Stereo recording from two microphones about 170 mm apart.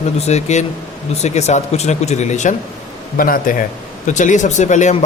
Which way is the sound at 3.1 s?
55° left (ahead or behind).